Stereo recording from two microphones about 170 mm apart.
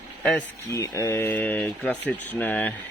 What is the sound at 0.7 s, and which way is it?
Speech, 20° left (ahead or behind).